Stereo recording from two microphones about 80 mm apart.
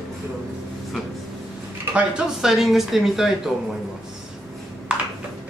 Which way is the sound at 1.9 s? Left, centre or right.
Centre.